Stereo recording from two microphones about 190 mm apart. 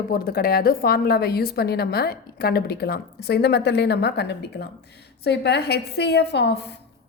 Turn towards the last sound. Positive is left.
turn(degrees=60)  # may be behind; listen again after turning